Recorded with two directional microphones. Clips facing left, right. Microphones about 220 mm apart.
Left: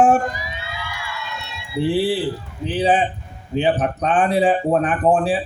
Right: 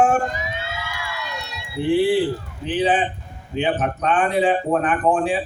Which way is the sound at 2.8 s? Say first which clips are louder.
Left 2 dB; 35° left (ahead or behind).